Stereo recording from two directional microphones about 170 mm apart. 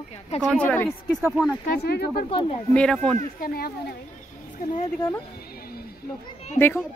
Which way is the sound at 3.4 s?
65° left (ahead or behind).